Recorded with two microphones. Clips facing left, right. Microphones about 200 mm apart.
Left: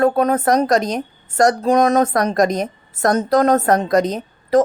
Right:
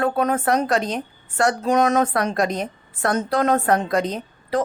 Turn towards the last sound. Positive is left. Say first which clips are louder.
# left 8 dB
turn(degrees=45)  # may be behind; listen again after turning